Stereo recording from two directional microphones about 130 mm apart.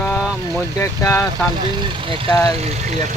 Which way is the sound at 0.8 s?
25° left (ahead or behind).